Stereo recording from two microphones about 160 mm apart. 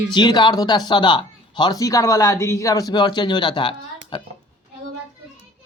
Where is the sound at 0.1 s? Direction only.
25° left (ahead or behind).